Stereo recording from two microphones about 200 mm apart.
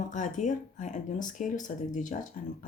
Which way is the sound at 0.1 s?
40° left (ahead or behind).